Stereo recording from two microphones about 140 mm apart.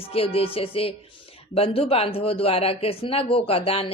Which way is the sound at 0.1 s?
45° left (ahead or behind).